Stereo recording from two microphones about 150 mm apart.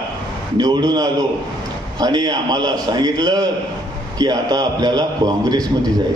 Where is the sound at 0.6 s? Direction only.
25° right (ahead or behind).